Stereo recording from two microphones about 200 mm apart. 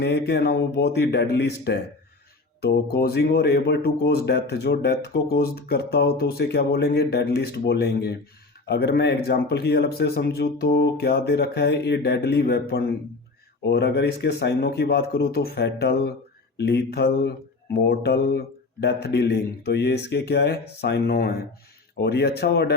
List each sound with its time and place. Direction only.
0.0 s speech: 55° left (ahead or behind)